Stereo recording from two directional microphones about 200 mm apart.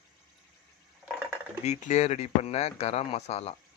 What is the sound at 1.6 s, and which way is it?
Speech, 35° left (ahead or behind).